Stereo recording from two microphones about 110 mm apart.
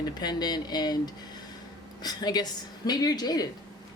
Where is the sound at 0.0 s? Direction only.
40° left (ahead or behind).